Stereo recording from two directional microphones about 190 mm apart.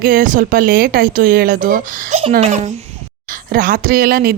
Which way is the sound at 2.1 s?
30° right (ahead or behind).